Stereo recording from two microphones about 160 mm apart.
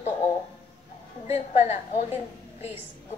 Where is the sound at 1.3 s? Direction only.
40° left (ahead or behind).